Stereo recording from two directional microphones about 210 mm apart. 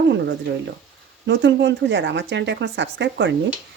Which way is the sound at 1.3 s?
60° right (ahead or behind).